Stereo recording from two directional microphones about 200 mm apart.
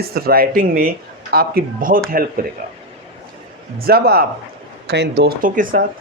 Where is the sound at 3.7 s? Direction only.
50° right (ahead or behind).